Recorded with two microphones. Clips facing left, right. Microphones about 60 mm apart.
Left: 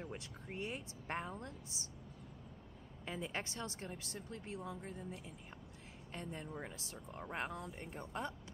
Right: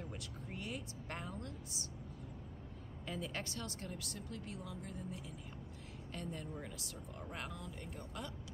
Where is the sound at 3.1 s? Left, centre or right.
Left.